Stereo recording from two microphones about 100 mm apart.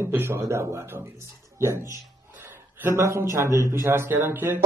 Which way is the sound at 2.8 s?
25° right (ahead or behind).